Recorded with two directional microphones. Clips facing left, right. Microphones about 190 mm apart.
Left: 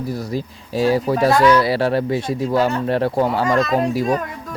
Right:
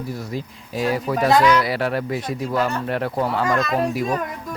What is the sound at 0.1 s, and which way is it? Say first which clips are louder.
Speech: left 4 dB; 35° left (ahead or behind).